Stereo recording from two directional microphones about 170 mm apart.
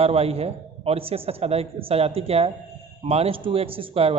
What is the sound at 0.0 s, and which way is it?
A woman's voice, 35° right (ahead or behind).